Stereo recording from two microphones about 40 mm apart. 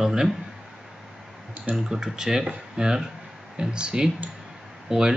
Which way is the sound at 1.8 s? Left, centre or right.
Centre.